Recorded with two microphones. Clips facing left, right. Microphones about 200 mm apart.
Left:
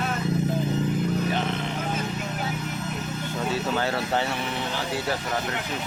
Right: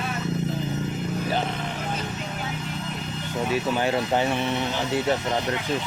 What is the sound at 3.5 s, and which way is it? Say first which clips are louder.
Speech: right 3 dB; 15° right (ahead or behind).